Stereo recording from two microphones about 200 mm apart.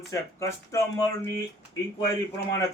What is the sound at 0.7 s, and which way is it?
Speech, 15° left (ahead or behind).